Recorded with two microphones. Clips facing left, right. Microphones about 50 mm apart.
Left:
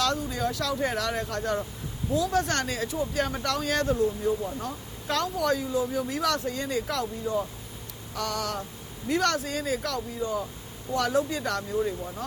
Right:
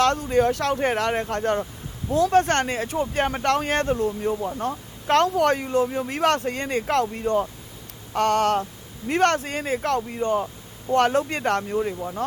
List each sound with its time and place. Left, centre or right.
0.0 s speech: right
6.0 s speech: right
8.1 s speech: right